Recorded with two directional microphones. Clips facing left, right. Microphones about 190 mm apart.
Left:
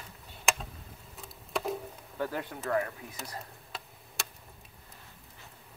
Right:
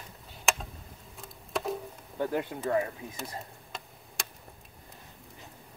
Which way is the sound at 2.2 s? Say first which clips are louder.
Right 4 dB; 20° right (ahead or behind).